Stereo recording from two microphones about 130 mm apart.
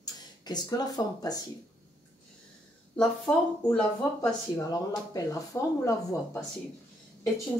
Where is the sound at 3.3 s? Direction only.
25° left (ahead or behind).